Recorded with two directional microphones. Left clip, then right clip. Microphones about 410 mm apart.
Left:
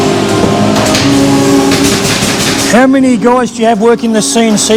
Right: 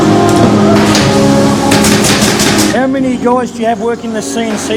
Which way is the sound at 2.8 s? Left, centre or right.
Left.